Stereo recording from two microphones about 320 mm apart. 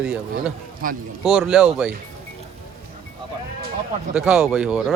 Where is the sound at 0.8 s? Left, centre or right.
Right.